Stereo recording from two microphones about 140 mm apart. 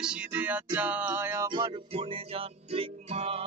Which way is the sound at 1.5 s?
35° right (ahead or behind).